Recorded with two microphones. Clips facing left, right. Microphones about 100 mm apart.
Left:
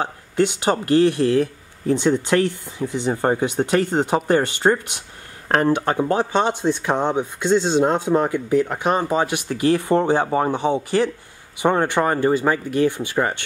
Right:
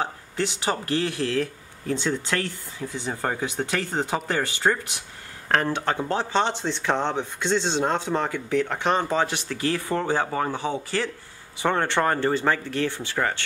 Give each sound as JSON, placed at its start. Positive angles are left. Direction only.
{"t": 0.7, "sound": "speech", "side_deg": 20}